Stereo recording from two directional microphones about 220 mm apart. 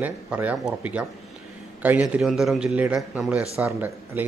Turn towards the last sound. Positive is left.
turn(degrees=-10)  # may be behind; listen again after turning